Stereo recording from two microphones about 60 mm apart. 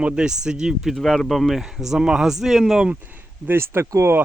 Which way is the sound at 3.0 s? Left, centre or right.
Right.